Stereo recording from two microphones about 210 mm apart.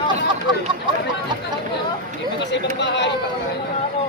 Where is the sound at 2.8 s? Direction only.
55° left (ahead or behind).